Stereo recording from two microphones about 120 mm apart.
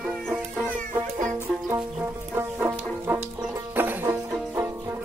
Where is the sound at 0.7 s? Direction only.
90° right.